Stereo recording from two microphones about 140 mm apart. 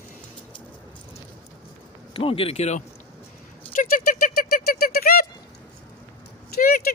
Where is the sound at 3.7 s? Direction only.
75° left (ahead or behind); by 5.3 s 90° left.